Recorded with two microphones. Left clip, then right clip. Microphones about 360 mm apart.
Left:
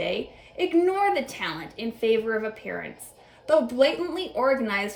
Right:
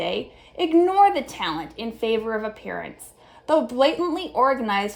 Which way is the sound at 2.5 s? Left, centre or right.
Centre.